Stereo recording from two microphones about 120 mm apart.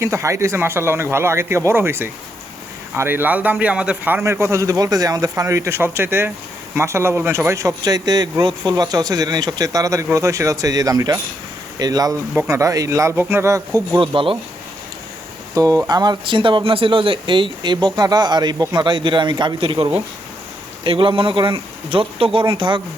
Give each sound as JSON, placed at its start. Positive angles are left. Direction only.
{"t": 0.0, "sound": "speech", "side_deg": -25}
{"t": 14.0, "sound": "speech", "side_deg": -45}
{"t": 15.5, "sound": "speech", "side_deg": -30}